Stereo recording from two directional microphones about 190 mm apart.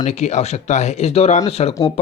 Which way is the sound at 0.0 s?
35° left (ahead or behind).